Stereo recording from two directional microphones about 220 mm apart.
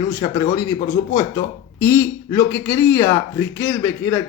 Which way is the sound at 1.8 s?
10° left (ahead or behind).